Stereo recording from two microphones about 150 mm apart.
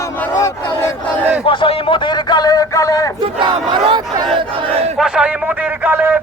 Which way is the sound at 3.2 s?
35° right (ahead or behind).